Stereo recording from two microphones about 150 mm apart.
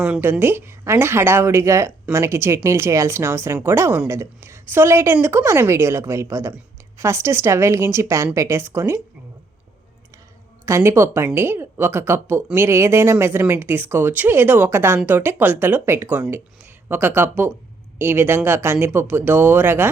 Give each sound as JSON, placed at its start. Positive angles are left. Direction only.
{"t": 0.0, "sound": "speech", "side_deg": -10}
{"t": 10.7, "sound": "speech", "side_deg": -20}